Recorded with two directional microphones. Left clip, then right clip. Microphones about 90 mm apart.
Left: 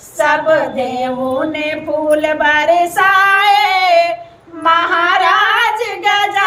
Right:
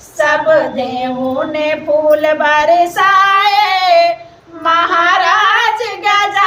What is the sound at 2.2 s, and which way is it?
Female singing, 20° right (ahead or behind).